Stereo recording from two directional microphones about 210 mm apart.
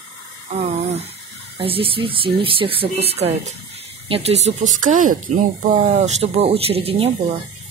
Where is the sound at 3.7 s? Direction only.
30° right (ahead or behind).